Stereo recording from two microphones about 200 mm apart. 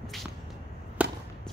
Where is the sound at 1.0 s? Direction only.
5° right (ahead or behind).